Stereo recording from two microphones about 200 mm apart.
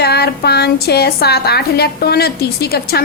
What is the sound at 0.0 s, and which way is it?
A woman's voice, 55° left (ahead or behind).